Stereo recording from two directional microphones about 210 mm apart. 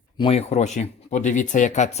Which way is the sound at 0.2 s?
30° left (ahead or behind).